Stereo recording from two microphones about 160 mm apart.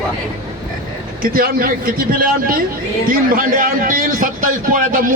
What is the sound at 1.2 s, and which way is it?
A man's voice, 65° right (ahead or behind).